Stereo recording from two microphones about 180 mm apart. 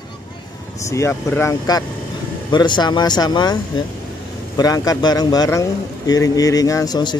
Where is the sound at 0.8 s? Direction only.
15° left (ahead or behind).